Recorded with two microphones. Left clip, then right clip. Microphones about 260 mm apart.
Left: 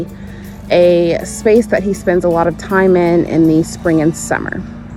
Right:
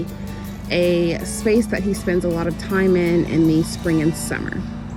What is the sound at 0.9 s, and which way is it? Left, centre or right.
Speech, left.